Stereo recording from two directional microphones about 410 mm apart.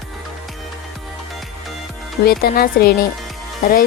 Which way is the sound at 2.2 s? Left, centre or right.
Left.